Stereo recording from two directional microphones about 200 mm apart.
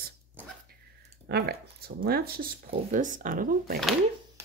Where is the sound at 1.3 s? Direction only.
50° right (ahead or behind).